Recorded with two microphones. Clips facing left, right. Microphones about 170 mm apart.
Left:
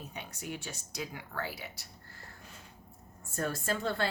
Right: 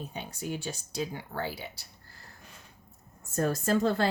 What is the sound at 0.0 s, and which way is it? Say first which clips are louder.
Speech: right 5 dB; 30° right (ahead or behind).